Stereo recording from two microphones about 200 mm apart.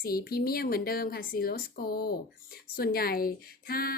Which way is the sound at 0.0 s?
50° left (ahead or behind).